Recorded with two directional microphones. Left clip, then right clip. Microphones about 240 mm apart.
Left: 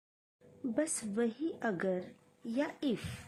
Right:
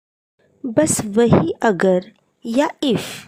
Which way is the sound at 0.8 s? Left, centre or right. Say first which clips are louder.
Right 19 dB; right.